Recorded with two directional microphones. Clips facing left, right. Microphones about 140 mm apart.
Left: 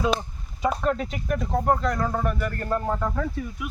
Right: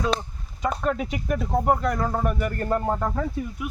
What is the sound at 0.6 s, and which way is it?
Speech, centre (ahead or behind).